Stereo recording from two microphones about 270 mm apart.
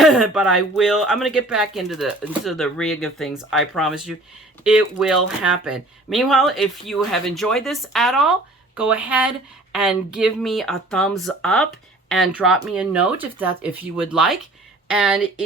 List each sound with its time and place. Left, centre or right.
0.0 s speech: centre